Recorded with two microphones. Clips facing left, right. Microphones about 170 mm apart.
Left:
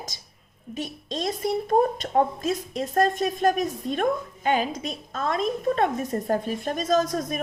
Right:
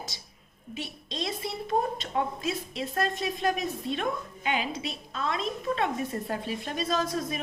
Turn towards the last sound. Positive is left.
turn(degrees=45)  # may be behind; listen again after turning